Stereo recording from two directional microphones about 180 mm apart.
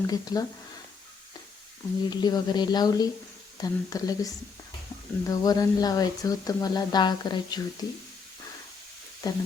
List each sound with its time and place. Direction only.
0.1 s speech: 20° left (ahead or behind)
2.0 s speech: 25° left (ahead or behind)
9.2 s speech: 20° left (ahead or behind)